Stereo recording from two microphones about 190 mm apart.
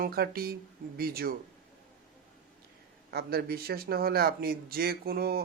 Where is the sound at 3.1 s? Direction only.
55° right (ahead or behind).